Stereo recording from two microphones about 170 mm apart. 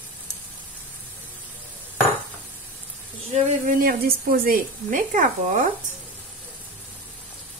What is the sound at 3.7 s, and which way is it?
Speech, 60° right (ahead or behind).